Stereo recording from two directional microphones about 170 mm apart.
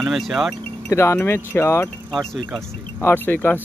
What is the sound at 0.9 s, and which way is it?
Wind chime, 15° left (ahead or behind).